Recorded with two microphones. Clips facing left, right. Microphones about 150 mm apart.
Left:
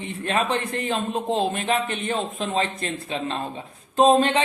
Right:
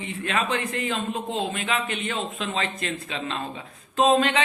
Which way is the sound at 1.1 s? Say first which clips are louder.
Left 4 dB; 50° left (ahead or behind).